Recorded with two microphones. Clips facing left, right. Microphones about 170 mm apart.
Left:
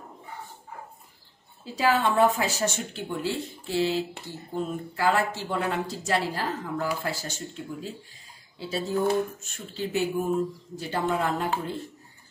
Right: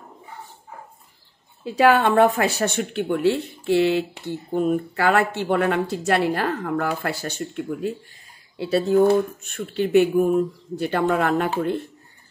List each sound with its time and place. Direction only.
1.6 s speech: 65° right (ahead or behind)